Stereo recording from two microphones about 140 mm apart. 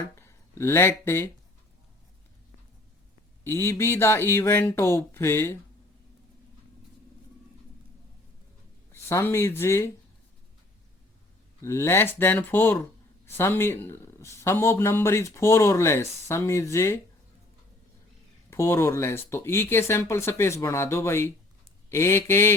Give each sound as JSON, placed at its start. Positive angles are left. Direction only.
{"t": 0.2, "sound": "speech", "side_deg": 15}
{"t": 3.4, "sound": "speech", "side_deg": 15}
{"t": 8.9, "sound": "speech", "side_deg": 20}
{"t": 11.6, "sound": "a man's voice", "side_deg": 20}
{"t": 18.5, "sound": "speech", "side_deg": 20}